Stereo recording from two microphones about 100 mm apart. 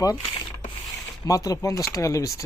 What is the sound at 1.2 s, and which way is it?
Speech, 35° left (ahead or behind).